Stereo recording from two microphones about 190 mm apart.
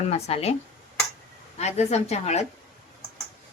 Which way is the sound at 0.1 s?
35° left (ahead or behind).